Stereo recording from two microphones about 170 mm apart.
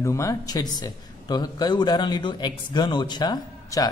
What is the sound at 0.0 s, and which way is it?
A man's voice, 15° left (ahead or behind).